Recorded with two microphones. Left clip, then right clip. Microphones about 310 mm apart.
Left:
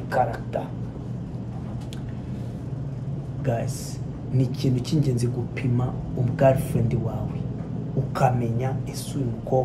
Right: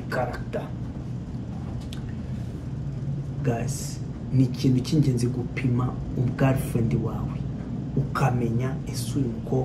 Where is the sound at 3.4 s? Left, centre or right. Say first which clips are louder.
Left 2 dB; centre.